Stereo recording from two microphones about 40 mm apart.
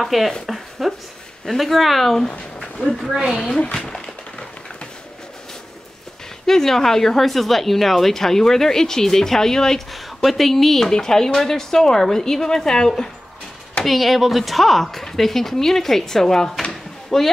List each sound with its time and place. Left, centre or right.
0.0 s a woman's voice: centre
0.5 s a sound: centre
1.6 s a woman's voice: centre
2.6 s a sound: centre
6.4 s speech: centre
9.9 s speech: centre
13.8 s a woman's voice: centre